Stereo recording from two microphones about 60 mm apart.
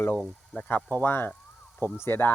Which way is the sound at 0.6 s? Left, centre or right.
Left.